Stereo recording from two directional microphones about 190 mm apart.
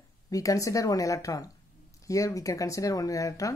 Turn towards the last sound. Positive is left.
turn(degrees=15)  # may be behind; listen again after turning